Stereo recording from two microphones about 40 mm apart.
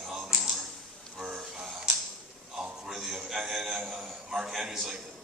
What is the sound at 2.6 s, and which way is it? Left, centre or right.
A man's voice, centre.